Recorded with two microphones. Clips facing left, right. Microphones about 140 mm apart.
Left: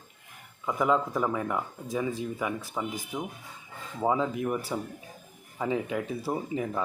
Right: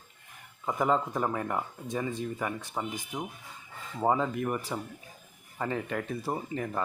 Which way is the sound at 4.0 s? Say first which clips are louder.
Even; centre (ahead or behind).